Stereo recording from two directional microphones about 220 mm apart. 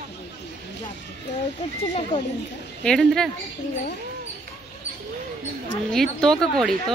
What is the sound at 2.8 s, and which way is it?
Speech, centre (ahead or behind).